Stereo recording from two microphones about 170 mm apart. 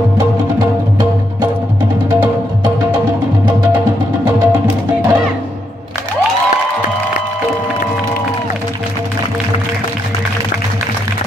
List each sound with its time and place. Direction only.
4.2 s music: 10° right (ahead or behind)